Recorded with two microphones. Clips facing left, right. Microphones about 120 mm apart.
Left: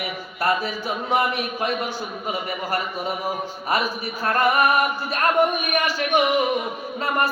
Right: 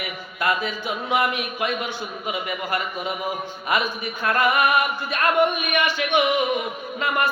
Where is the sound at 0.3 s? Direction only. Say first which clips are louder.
Left 1 dB; 35° left (ahead or behind).